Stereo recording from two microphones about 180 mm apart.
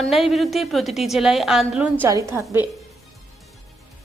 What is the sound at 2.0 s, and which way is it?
Speech, 20° right (ahead or behind).